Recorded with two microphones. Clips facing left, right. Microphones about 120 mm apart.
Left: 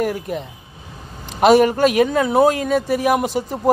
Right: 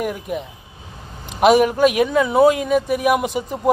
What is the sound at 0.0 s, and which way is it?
A man's voice, 15° right (ahead or behind).